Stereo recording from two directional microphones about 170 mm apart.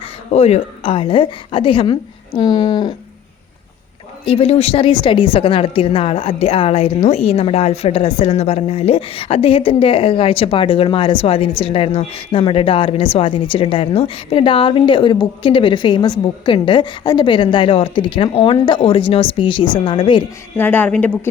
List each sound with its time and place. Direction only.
0.3 s a woman's voice: 40° left (ahead or behind)
4.3 s a woman's voice: 35° left (ahead or behind)
20.6 s a woman's voice: 10° left (ahead or behind)